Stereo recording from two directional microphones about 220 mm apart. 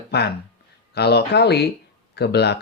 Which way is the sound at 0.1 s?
50° left (ahead or behind).